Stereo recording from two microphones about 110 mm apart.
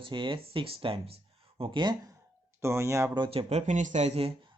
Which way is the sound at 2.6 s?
25° right (ahead or behind).